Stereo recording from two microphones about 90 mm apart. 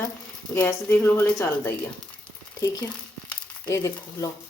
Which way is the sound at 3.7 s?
35° left (ahead or behind).